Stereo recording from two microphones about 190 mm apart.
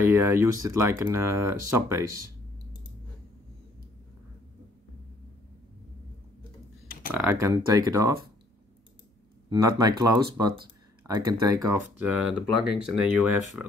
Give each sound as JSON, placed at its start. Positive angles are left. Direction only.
{"t": 0.0, "sound": "speech", "side_deg": -15}
{"t": 7.1, "sound": "speech", "side_deg": -10}
{"t": 9.5, "sound": "speech", "side_deg": -20}
{"t": 12.2, "sound": "speech", "side_deg": -5}